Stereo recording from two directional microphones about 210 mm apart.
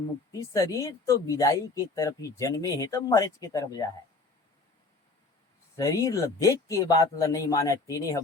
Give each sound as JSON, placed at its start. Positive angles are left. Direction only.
{"t": 0.3, "sound": "speech", "side_deg": 15}
{"t": 5.7, "sound": "speech", "side_deg": 15}